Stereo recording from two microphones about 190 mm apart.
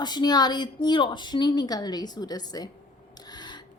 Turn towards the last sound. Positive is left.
turn(degrees=20)  # may be behind; listen again after turning